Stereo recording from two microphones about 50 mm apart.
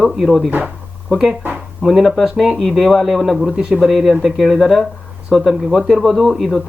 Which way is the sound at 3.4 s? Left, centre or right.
Centre.